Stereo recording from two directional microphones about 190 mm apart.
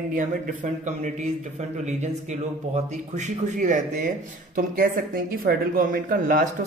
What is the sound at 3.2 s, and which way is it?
A woman's voice, 40° right (ahead or behind).